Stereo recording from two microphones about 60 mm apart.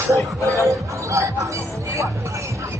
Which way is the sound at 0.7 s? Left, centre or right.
Right.